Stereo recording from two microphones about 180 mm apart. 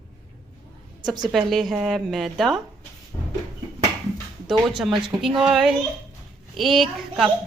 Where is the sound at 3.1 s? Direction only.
15° left (ahead or behind).